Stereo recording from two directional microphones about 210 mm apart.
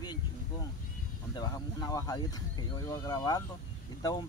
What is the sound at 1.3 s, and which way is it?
Speech, 15° left (ahead or behind).